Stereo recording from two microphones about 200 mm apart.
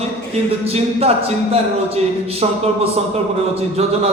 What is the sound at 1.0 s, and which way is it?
Speech, 30° right (ahead or behind).